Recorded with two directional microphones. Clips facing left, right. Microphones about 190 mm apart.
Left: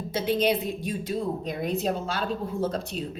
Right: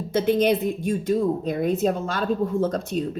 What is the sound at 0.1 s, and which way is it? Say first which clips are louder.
A woman's voice: right 5 dB; 50° right (ahead or behind).